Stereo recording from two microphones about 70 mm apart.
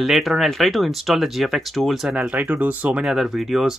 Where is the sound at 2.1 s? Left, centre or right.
Centre.